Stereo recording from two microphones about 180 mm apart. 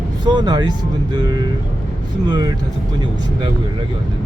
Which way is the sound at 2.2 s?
25° right (ahead or behind).